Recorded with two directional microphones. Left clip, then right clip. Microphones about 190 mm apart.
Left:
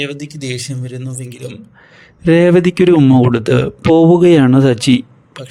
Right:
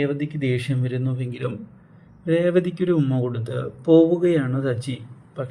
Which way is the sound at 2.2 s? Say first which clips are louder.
Left 10 dB; 45° left (ahead or behind).